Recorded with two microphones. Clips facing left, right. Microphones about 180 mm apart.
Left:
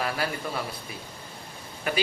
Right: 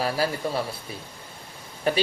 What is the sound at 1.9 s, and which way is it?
Speech, 30° right (ahead or behind).